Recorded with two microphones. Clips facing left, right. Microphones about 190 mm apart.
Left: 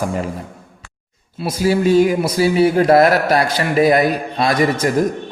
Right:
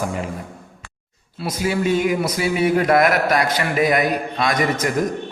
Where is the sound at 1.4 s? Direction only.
35° left (ahead or behind).